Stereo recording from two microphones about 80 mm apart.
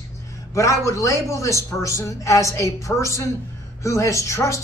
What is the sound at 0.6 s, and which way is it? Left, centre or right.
A woman's voice, left.